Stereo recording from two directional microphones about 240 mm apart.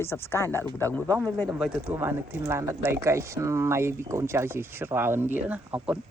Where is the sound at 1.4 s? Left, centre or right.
Centre.